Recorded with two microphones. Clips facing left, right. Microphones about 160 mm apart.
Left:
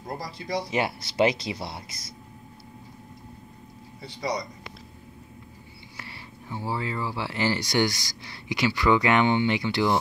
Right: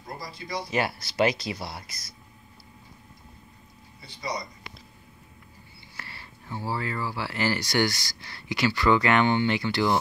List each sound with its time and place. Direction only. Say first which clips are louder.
0.2 s speech: left 3 dB; 80° left
0.7 s speech: left 1 dB; 20° left (ahead or behind)
4.0 s speech: left 4 dB; 80° left
5.9 s speech: left 2 dB; 15° left (ahead or behind)